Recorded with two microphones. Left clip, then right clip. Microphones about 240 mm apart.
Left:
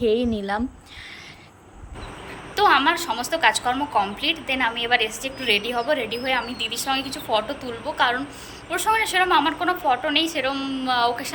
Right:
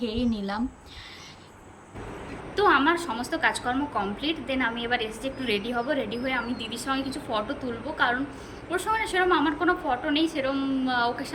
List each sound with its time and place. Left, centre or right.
0.0 s a woman's voice: centre
2.6 s a woman's voice: centre